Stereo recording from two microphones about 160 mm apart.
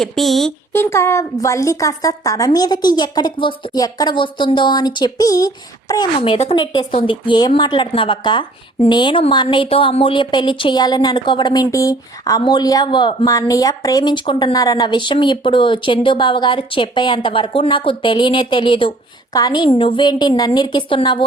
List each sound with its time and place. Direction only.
0.0 s speech: centre (ahead or behind)
0.7 s a woman's voice: 15° left (ahead or behind); by 21.2 s 30° left (ahead or behind)